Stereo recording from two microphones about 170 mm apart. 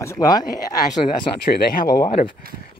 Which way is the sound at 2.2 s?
55° left (ahead or behind).